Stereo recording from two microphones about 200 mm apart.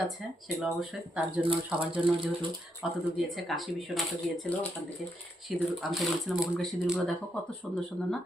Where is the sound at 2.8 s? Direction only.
Centre (ahead or behind).